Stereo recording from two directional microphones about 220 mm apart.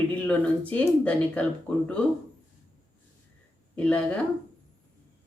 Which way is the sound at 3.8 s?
5° left (ahead or behind).